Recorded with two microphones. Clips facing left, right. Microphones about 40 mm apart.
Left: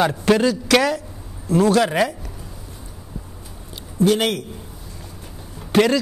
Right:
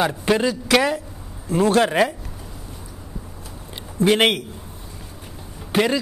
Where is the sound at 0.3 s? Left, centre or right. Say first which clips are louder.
Left 3 dB; centre.